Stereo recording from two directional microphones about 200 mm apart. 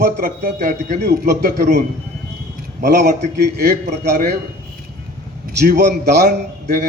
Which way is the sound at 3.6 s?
50° right (ahead or behind).